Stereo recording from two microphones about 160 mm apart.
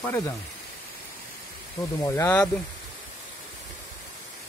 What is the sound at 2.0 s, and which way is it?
Speech, 20° left (ahead or behind).